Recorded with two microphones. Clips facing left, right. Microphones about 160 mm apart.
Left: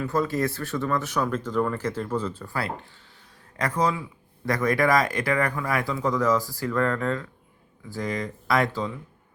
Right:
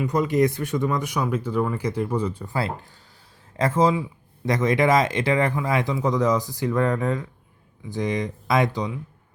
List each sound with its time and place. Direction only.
0.0 s speech: 15° right (ahead or behind)